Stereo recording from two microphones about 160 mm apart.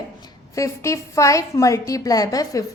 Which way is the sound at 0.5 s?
20° left (ahead or behind).